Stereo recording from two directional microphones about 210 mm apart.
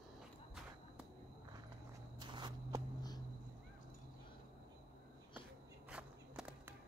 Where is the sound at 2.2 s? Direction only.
20° right (ahead or behind).